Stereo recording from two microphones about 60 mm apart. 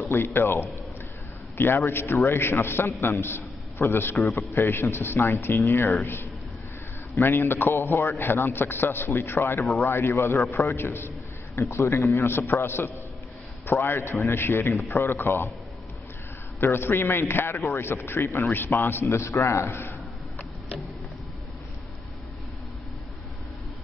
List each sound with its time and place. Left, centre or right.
0.1 s a man's voice: left
7.2 s a man's voice: left
11.7 s a man's voice: left
16.5 s a man's voice: left
19.0 s a man's voice: left